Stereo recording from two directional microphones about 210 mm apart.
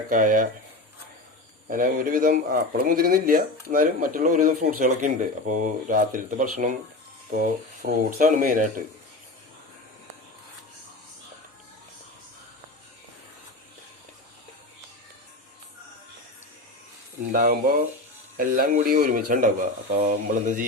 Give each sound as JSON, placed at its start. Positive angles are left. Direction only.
{"t": 0.1, "sound": "speech", "side_deg": -40}
{"t": 1.6, "sound": "speech", "side_deg": -40}
{"t": 17.3, "sound": "speech", "side_deg": -45}
{"t": 19.9, "sound": "speech", "side_deg": -30}